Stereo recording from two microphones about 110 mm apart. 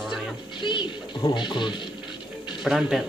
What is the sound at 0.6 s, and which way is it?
Music, 45° left (ahead or behind).